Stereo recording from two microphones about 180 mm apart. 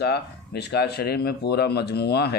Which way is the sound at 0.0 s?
65° left (ahead or behind).